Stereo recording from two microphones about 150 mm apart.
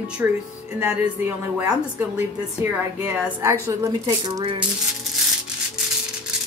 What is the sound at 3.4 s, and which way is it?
A woman's voice, 20° right (ahead or behind).